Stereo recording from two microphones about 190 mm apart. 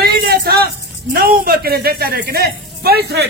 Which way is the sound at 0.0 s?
55° right (ahead or behind).